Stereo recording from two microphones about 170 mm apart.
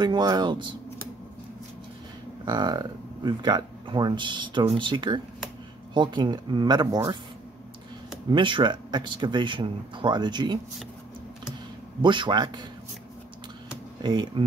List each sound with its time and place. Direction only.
0.0 s speech: 25° right (ahead or behind)
2.4 s speech: 25° right (ahead or behind)
8.3 s speech: 30° right (ahead or behind)
12.0 s speech: 30° right (ahead or behind)
14.0 s speech: 30° right (ahead or behind)